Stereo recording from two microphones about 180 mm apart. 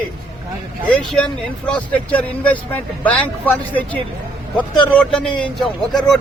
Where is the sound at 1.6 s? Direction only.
5° left (ahead or behind).